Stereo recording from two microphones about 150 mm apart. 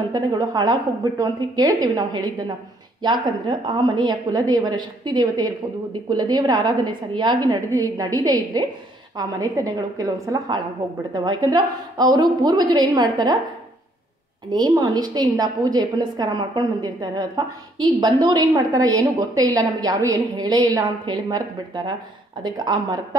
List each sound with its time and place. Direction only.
0.1 s a woman's voice: 25° right (ahead or behind)
14.5 s a woman's voice: 25° right (ahead or behind)